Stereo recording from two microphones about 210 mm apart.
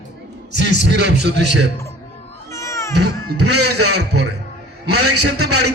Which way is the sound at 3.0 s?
50° right (ahead or behind).